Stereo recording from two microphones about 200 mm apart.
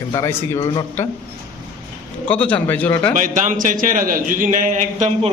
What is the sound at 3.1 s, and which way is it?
A man's voice, 40° right (ahead or behind).